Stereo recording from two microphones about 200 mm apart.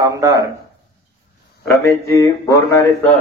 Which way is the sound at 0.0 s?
15° right (ahead or behind).